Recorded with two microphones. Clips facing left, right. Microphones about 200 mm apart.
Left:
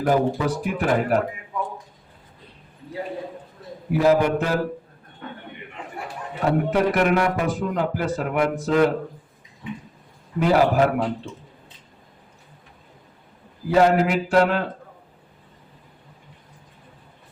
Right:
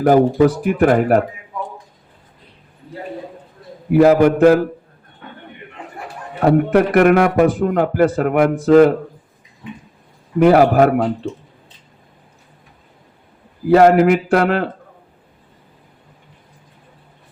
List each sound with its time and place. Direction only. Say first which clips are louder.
0.0 s a man's voice: right 9 dB; 60° right (ahead or behind)
3.9 s a man's voice: right 7 dB; 60° right (ahead or behind)
6.4 s a man's voice: right 7 dB; 55° right (ahead or behind)
10.4 s a man's voice: right 7 dB; 55° right (ahead or behind)
13.7 s a man's voice: right 7 dB; 60° right (ahead or behind)